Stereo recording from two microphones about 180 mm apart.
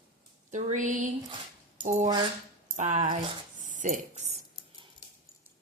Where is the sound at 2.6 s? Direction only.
45° right (ahead or behind).